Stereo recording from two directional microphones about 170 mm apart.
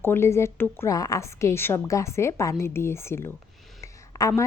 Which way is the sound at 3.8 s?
20° left (ahead or behind).